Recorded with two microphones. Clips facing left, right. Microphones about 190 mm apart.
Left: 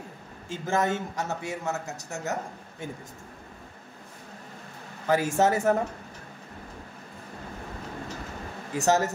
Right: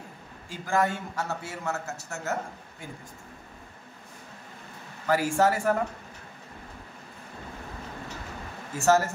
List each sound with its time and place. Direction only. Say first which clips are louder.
0.5 s a man's voice: even; 20° left (ahead or behind)
5.0 s speech: even; 20° left (ahead or behind)
8.7 s speech: right 1 dB; 20° left (ahead or behind)